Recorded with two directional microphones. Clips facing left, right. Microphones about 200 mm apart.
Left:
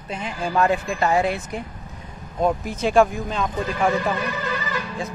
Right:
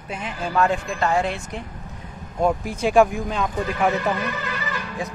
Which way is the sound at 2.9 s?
15° right (ahead or behind).